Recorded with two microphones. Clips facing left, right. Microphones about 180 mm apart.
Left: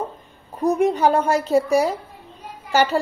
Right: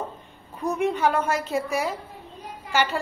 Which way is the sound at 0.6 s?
40° left (ahead or behind).